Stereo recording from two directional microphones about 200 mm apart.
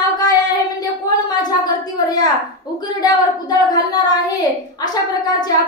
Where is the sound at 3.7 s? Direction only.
20° left (ahead or behind).